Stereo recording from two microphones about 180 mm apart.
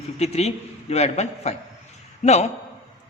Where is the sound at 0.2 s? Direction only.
35° left (ahead or behind).